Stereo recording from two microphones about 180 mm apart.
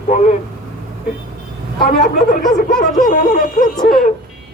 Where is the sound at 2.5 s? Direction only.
50° left (ahead or behind).